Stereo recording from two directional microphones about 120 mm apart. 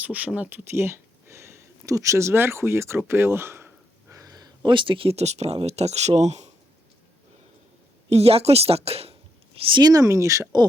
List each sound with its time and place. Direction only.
0.0 s speech: 10° right (ahead or behind)
4.1 s speech: 30° right (ahead or behind); by 6.5 s 70° right (ahead or behind)
8.1 s a woman's voice: 55° right (ahead or behind)
9.6 s speech: 40° right (ahead or behind)